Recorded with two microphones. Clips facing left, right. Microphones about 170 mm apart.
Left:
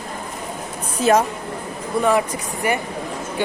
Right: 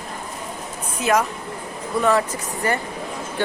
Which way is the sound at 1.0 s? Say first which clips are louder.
Left 4 dB; 30° left (ahead or behind).